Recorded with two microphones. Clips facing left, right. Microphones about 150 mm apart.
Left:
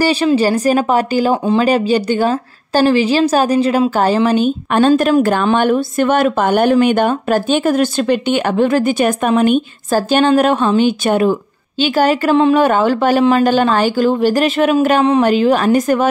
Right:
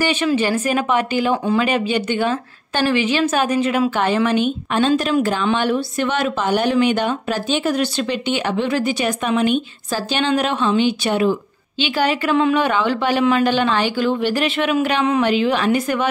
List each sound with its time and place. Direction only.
0.0 s speech: 35° left (ahead or behind)